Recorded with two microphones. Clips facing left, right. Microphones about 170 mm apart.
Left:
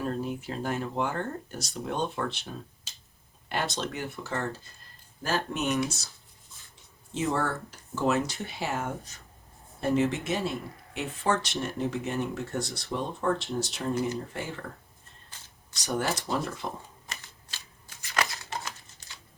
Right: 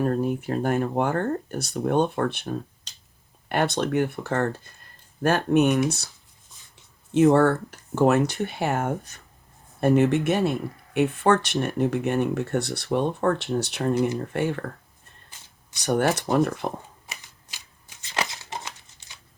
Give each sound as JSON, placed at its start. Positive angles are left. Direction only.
{"t": 0.0, "sound": "speech", "side_deg": -55}
{"t": 2.9, "sound": "finger snapping", "side_deg": 5}
{"t": 3.5, "sound": "speech", "side_deg": -60}
{"t": 7.1, "sound": "speech", "side_deg": -60}
{"t": 15.7, "sound": "speech", "side_deg": -60}
{"t": 17.1, "sound": "shuffling cards", "side_deg": -15}
{"t": 18.0, "sound": "crumpling", "side_deg": -25}